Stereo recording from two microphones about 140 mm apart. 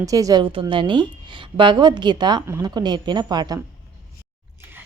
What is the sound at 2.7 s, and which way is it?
Speech, 30° right (ahead or behind).